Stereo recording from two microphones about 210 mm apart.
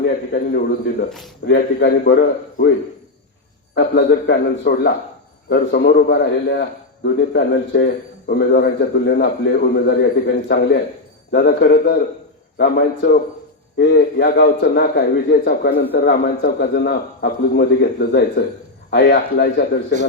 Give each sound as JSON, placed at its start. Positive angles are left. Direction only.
{"t": 0.0, "sound": "a man's voice", "side_deg": 50}
{"t": 3.8, "sound": "a man's voice", "side_deg": 50}